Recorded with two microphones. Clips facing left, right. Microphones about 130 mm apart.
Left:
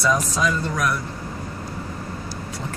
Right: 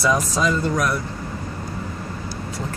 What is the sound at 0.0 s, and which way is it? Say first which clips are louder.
Speech: right 1 dB; 5° right (ahead or behind).